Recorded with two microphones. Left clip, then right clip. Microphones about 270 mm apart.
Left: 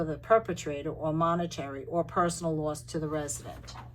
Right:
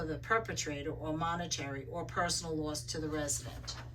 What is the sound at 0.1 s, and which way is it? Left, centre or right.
Speech, centre.